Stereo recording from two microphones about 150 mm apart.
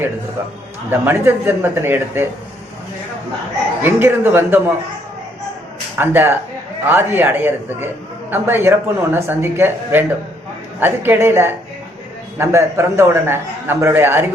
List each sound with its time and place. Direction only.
0.9 s a man's voice: 15° right (ahead or behind)
3.8 s a man's voice: 15° right (ahead or behind)
6.0 s a man's voice: 15° right (ahead or behind)